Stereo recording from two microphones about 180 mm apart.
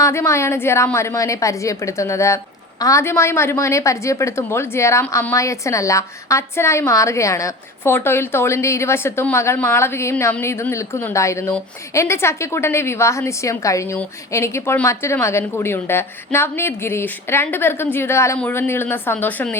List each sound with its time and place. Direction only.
0.0 s a woman's voice: 15° left (ahead or behind)